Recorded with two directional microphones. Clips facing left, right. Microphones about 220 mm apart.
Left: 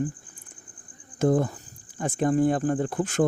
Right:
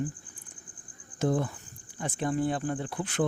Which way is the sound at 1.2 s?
50° left (ahead or behind).